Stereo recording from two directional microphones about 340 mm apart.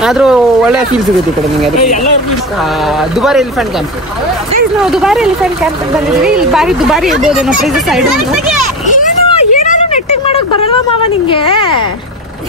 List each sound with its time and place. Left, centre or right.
0.0 s speech: centre
3.0 s speech: centre
4.8 s speech: centre
8.8 s a sound: left
11.2 s speech: centre